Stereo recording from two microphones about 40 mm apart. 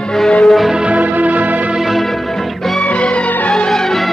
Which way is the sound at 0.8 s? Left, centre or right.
Right.